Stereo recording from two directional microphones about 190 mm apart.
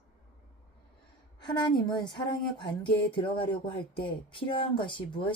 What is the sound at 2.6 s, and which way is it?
Speech, 25° left (ahead or behind).